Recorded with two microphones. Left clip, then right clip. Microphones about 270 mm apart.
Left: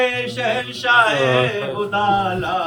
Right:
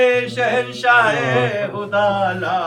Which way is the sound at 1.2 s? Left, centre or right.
Left.